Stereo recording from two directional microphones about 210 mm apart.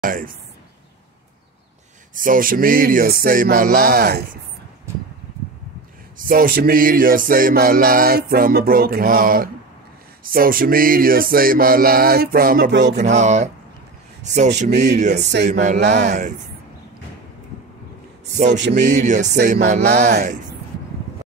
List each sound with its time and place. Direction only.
0.0 s speech: 40° right (ahead or behind)
2.1 s music: 40° right (ahead or behind)
6.1 s music: 40° right (ahead or behind)
13.0 s speech: 35° right (ahead or behind)
18.8 s speech: 35° right (ahead or behind)
20.1 s music: 50° right (ahead or behind)